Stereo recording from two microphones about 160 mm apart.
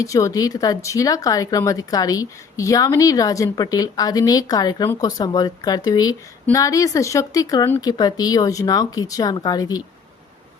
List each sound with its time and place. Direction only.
0.0 s speech: 20° left (ahead or behind)